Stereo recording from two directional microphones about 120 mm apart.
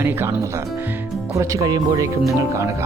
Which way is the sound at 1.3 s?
25° right (ahead or behind).